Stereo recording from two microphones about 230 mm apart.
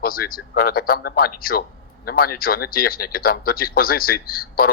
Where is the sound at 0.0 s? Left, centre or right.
Left.